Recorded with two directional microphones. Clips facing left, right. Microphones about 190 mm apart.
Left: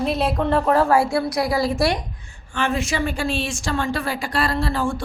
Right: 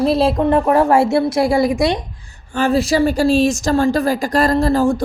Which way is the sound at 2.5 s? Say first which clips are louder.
Right 8 dB; 35° right (ahead or behind).